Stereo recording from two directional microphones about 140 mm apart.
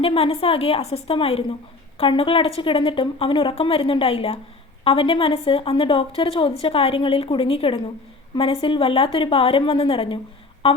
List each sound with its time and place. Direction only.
0.0 s a woman's voice: 45° left (ahead or behind)